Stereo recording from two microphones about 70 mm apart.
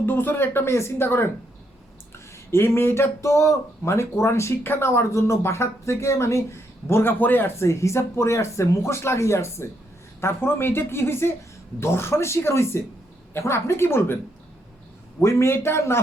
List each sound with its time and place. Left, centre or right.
0.0 s speech: left
7.5 s speech: left
15.2 s speech: left